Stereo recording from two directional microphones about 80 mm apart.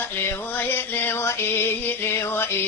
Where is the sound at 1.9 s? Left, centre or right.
Left.